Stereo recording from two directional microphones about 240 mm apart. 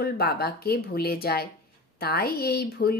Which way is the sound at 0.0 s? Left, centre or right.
Left.